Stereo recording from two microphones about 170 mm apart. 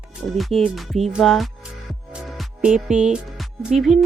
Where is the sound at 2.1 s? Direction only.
5° right (ahead or behind).